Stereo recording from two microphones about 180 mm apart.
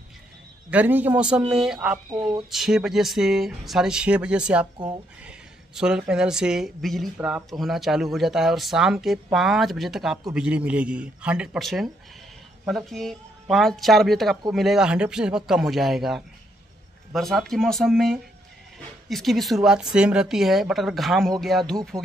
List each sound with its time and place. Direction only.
0.7 s a man's voice: 10° right (ahead or behind)
4.7 s speech: 25° right (ahead or behind)
5.2 s speech: 5° right (ahead or behind)